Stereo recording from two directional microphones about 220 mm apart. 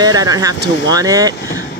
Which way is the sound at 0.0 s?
15° right (ahead or behind).